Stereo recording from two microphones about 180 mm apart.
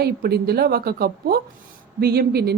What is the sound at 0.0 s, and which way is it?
A woman's voice, 60° right (ahead or behind).